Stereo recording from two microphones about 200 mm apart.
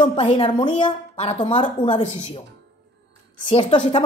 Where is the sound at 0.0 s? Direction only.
25° left (ahead or behind).